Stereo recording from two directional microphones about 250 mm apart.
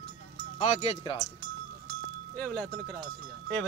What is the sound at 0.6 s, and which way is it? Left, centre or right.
Speech, left.